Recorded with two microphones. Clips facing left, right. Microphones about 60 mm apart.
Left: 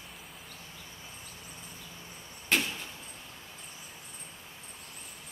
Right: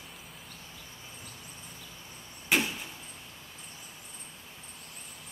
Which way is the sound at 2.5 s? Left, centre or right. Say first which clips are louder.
Right 2 dB; centre.